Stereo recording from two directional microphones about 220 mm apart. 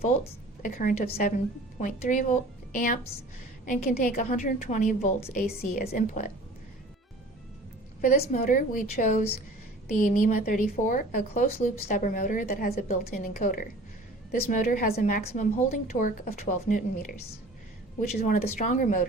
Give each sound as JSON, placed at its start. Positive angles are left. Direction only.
{"t": 0.6, "sound": "a woman's voice", "side_deg": 40}
{"t": 8.0, "sound": "a woman's voice", "side_deg": 35}
{"t": 18.3, "sound": "a woman's voice", "side_deg": 35}